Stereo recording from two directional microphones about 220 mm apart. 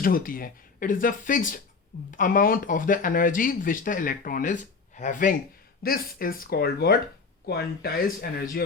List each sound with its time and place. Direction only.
0.0 s speech: 40° left (ahead or behind)